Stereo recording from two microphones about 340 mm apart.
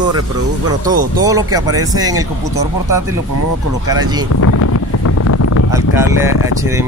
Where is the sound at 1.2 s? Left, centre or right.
Centre.